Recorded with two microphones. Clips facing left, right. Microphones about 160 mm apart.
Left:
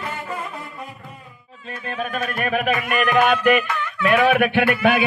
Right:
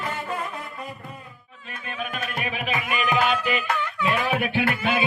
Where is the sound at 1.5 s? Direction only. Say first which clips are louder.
Left 6 dB; 35° left (ahead or behind); by 2.8 s 50° left (ahead or behind).